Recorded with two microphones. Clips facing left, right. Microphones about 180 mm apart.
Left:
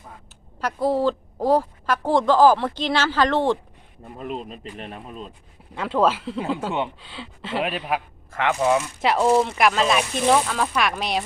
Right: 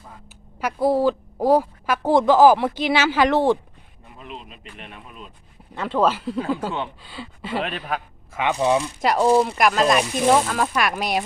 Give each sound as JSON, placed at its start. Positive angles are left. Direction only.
{"t": 0.6, "sound": "a woman's voice", "side_deg": -10}
{"t": 4.0, "sound": "speech", "side_deg": 45}
{"t": 5.7, "sound": "speech", "side_deg": 5}
{"t": 7.6, "sound": "a man's voice", "side_deg": 5}
{"t": 8.3, "sound": "a woman's voice", "side_deg": -15}